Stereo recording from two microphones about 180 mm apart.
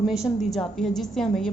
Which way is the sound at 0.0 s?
Centre (ahead or behind).